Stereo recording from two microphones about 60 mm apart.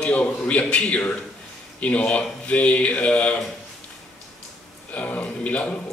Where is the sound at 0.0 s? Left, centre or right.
Left.